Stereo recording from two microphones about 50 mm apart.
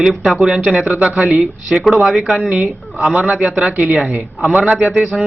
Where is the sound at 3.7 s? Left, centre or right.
Right.